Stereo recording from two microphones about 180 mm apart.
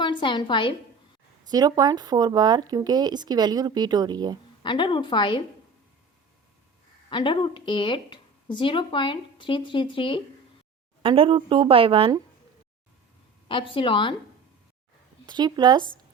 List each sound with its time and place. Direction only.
0.0 s a woman's voice: 25° left (ahead or behind)
1.5 s speech: 20° right (ahead or behind)
4.6 s speech: 25° left (ahead or behind)
7.1 s speech: 25° left (ahead or behind)
11.0 s speech: 30° right (ahead or behind)
13.5 s speech: 30° left (ahead or behind)
15.3 s speech: 25° right (ahead or behind)